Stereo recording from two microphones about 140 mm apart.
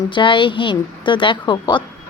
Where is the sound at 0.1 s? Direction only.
35° left (ahead or behind).